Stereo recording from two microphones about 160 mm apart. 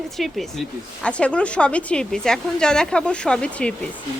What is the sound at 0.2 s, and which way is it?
A woman's voice, centre (ahead or behind).